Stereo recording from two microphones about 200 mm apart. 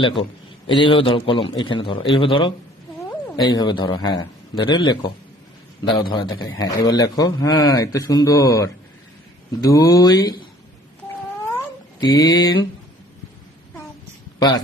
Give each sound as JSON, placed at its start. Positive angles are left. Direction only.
{"t": 0.0, "sound": "a man's voice", "side_deg": 25}
{"t": 11.5, "sound": "cat", "side_deg": 20}
{"t": 14.3, "sound": "speech", "side_deg": 20}